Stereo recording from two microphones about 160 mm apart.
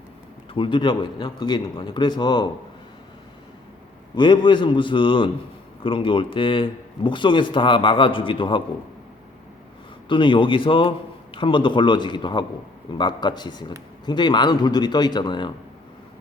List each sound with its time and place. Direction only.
0.5 s a man's voice: 30° left (ahead or behind)
4.1 s speech: 30° left (ahead or behind)
10.1 s a man's voice: 30° left (ahead or behind)